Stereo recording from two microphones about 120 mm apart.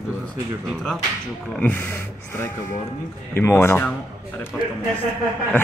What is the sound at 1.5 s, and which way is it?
Speech, 15° left (ahead or behind).